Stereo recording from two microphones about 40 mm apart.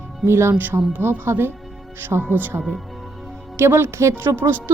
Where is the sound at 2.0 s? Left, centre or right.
Right.